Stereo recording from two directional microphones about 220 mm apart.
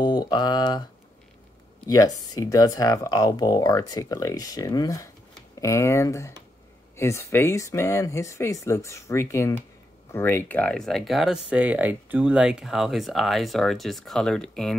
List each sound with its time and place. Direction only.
0.0 s speech: 20° left (ahead or behind)
1.9 s speech: 15° left (ahead or behind)